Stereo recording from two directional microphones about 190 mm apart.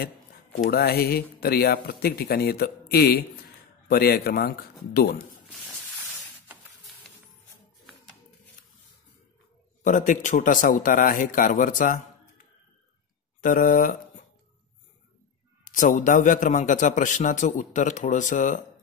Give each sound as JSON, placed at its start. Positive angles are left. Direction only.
{"t": 0.0, "sound": "speech", "side_deg": 55}
{"t": 9.8, "sound": "speech", "side_deg": 40}
{"t": 13.4, "sound": "speech", "side_deg": 45}
{"t": 15.6, "sound": "a man's voice", "side_deg": 45}